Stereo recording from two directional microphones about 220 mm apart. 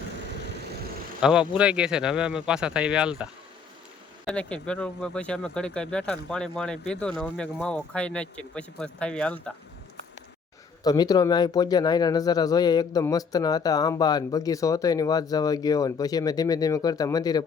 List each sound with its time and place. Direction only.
1.2 s speech: 5° right (ahead or behind)
4.3 s speech: 5° left (ahead or behind)
10.8 s speech: 15° left (ahead or behind)